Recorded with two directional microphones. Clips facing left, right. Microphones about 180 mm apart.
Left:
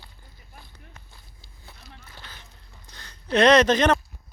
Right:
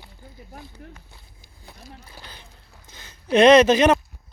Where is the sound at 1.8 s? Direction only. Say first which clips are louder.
Right 7 dB; 45° right (ahead or behind).